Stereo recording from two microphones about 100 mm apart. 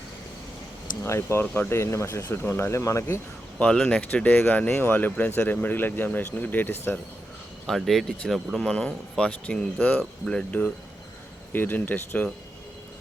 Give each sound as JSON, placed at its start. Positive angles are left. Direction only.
{"t": 1.0, "sound": "speech", "side_deg": 25}
{"t": 3.6, "sound": "speech", "side_deg": 10}
{"t": 7.7, "sound": "speech", "side_deg": 0}